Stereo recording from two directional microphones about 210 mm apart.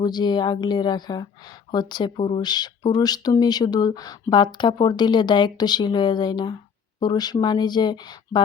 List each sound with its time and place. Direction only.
0.0 s a woman's voice: 20° left (ahead or behind)